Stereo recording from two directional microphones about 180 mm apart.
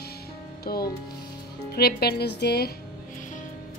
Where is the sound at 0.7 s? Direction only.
55° left (ahead or behind).